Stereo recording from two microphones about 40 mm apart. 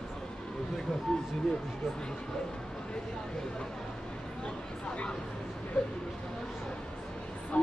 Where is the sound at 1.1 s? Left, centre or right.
Centre.